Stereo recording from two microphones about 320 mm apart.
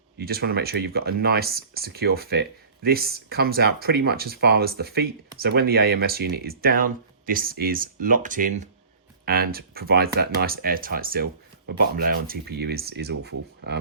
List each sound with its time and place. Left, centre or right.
0.2 s speech: right